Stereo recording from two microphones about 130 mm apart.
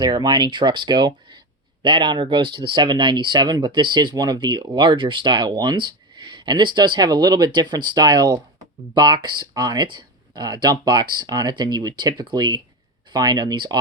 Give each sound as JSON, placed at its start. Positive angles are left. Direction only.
{"t": 0.0, "sound": "speech", "side_deg": -35}